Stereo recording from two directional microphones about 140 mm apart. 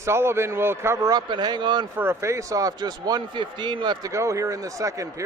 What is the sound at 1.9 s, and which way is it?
A man's voice, 15° right (ahead or behind).